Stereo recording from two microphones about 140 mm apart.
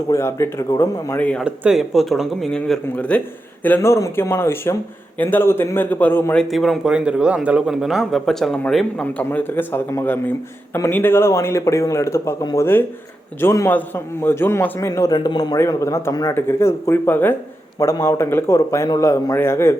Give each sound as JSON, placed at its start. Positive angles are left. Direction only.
{"t": 0.1, "sound": "a man's voice", "side_deg": 20}
{"t": 1.2, "sound": "a man's voice", "side_deg": 10}
{"t": 1.5, "sound": "a man's voice", "side_deg": -5}
{"t": 6.5, "sound": "a man's voice", "side_deg": 0}